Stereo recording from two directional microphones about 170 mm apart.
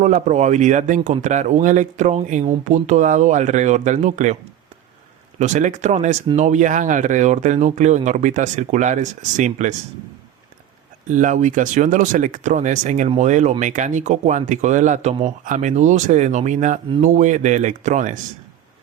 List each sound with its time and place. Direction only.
0.0 s speech: 45° right (ahead or behind)
5.4 s speech: 45° right (ahead or behind)
11.1 s speech: 50° right (ahead or behind)